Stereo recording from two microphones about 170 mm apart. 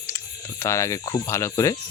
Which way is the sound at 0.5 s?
20° left (ahead or behind).